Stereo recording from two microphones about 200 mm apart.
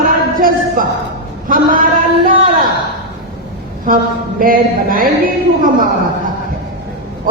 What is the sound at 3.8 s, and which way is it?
A woman's voice, 45° right (ahead or behind).